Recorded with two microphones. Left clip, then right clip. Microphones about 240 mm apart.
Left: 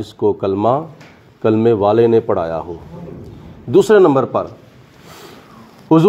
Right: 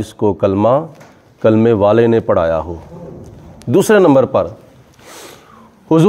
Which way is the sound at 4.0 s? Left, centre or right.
Right.